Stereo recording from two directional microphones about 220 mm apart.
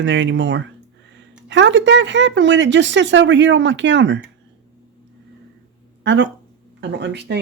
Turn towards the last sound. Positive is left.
turn(degrees=-50)  # may be behind; listen again after turning